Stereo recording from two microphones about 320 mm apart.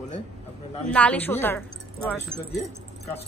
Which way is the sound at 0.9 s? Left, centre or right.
Centre.